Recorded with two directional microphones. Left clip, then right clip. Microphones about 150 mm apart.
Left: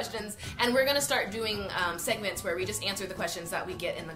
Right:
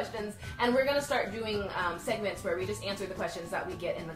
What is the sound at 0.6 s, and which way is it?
A woman's voice, 15° left (ahead or behind).